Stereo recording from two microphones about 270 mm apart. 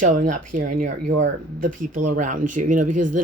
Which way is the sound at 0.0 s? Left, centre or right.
Right.